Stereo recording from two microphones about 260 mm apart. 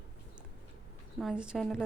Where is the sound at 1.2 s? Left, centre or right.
Centre.